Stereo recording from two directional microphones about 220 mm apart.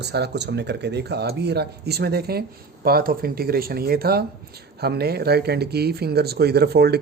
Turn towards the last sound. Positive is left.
turn(degrees=-45)  # may be behind; listen again after turning